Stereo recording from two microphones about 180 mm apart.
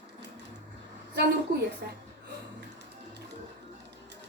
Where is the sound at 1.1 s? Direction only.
65° right (ahead or behind).